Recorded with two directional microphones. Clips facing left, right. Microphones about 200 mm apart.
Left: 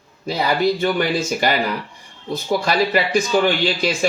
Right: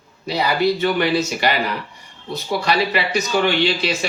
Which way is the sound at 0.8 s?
50° left (ahead or behind).